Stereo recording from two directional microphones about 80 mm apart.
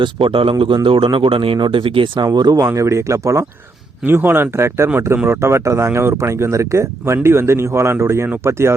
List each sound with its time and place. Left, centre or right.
0.0 s speech: right
2.2 s speech: right
4.0 s speech: right